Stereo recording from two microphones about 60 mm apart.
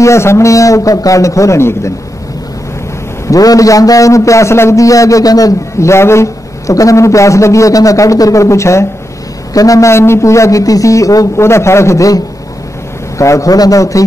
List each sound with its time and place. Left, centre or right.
0.0 s speech: left
1.6 s a man's voice: left
3.3 s a man's voice: left
5.8 s a man's voice: left
6.7 s speech: left
9.5 s speech: left
11.3 s a man's voice: left
13.2 s a man's voice: left